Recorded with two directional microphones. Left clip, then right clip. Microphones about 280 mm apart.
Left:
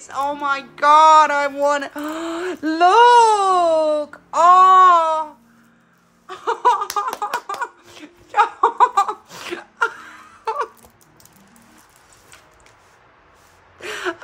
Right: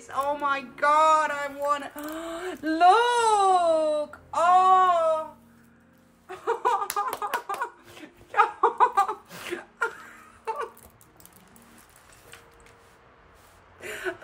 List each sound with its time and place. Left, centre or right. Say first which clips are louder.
0.1 s speech: left 5 dB; centre; by 5.2 s left
6.2 s a sound: left 9 dB; centre
13.7 s gasp: left 7 dB; centre